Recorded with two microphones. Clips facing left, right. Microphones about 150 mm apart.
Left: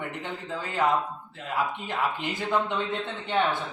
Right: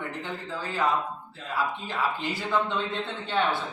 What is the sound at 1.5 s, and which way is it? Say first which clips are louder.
A man's voice: left 1 dB; 20° left (ahead or behind).